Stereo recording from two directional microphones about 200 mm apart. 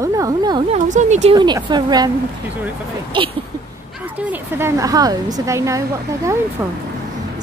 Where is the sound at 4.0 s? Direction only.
10° right (ahead or behind).